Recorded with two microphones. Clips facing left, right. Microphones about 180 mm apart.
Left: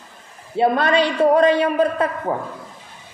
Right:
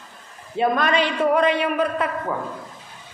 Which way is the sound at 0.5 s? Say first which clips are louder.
Left 3 dB; 30° left (ahead or behind).